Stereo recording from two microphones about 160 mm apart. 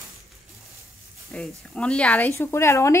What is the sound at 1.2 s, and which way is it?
Speech, 5° left (ahead or behind).